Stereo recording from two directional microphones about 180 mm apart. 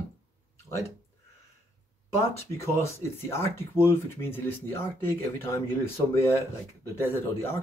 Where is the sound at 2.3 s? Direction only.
15° left (ahead or behind).